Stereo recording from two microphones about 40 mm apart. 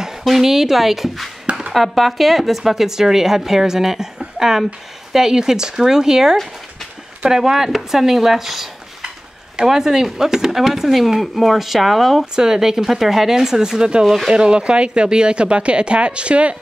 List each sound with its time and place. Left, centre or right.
0.2 s speech: centre
1.4 s chopping: right
1.7 s speech: centre
9.7 s speech: centre
12.4 s speech: centre
14.0 s speech: centre
14.3 s speech: right